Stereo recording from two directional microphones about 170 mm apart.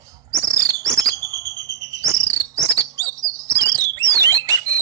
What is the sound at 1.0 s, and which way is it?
Bird, 20° right (ahead or behind).